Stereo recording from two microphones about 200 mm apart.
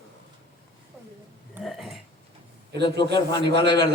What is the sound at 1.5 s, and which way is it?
Burping, centre (ahead or behind).